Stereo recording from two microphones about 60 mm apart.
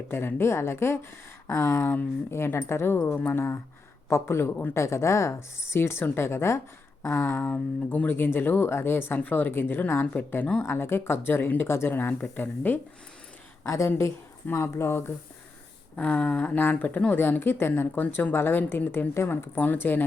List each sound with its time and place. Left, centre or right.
0.1 s speech: left
7.4 s speech: left
13.7 s speech: left
16.0 s a sound: left
16.6 s speech: left